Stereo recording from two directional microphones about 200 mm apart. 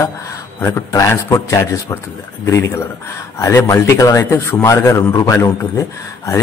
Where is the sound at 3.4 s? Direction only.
15° left (ahead or behind).